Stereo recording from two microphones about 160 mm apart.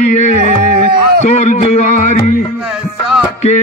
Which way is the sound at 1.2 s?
45° left (ahead or behind).